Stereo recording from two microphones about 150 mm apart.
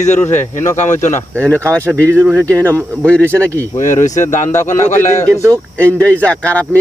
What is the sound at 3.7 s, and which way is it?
Speech, 55° left (ahead or behind).